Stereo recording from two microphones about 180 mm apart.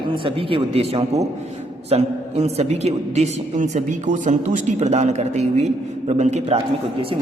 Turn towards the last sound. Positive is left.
turn(degrees=-40)  # may be behind; listen again after turning